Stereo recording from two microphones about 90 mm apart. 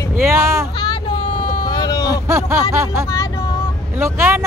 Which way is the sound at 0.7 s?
50° left (ahead or behind).